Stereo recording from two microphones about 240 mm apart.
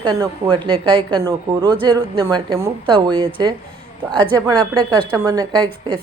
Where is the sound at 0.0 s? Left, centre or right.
Centre.